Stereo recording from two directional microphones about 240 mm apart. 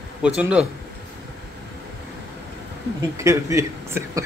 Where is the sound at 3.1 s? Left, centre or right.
Centre.